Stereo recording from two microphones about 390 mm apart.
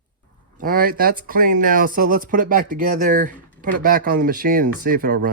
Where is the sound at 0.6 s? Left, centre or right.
Right.